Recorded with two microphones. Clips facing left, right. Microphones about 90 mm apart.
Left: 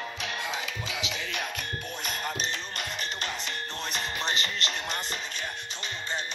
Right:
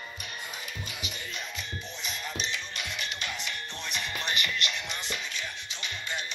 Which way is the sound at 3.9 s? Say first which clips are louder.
Left 1 dB; 30° left (ahead or behind).